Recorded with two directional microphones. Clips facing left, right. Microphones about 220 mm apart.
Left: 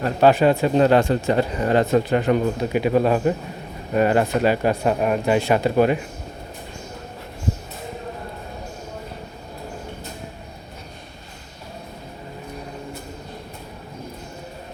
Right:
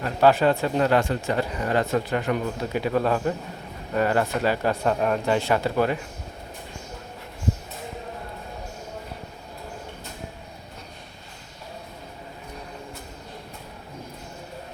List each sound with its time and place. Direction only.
0.2 s speech: 15° left (ahead or behind)
2.7 s speech: 15° left (ahead or behind)